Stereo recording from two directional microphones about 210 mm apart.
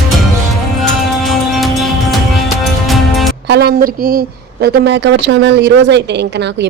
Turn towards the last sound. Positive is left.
turn(degrees=-55)  # may be behind; listen again after turning